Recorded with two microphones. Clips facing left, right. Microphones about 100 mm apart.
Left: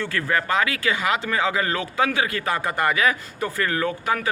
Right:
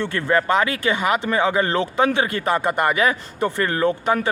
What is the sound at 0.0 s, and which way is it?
Speech, 25° right (ahead or behind).